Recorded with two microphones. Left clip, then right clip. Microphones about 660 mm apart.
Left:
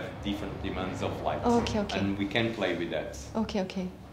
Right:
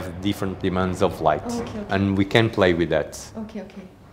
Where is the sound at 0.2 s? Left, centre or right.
Right.